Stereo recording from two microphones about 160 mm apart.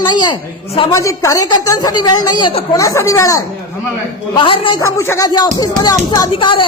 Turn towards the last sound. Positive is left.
turn(degrees=30)  # may be behind; listen again after turning